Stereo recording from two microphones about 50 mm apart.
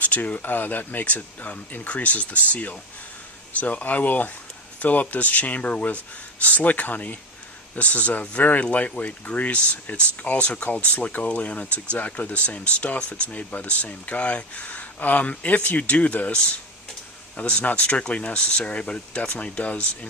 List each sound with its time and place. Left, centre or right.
0.0 s speech: left